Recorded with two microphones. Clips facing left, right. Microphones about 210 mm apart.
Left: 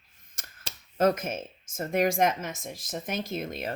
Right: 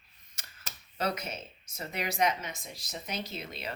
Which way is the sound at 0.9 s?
45° left (ahead or behind).